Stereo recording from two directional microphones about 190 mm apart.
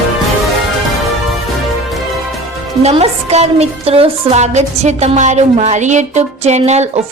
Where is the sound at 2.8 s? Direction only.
35° right (ahead or behind).